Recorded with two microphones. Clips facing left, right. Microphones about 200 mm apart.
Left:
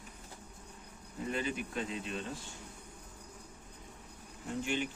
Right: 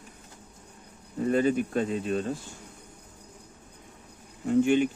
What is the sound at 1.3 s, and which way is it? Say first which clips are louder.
Speech: right 13 dB; 45° right (ahead or behind).